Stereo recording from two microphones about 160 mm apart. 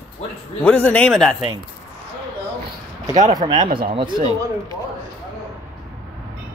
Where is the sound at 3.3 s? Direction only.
25° right (ahead or behind).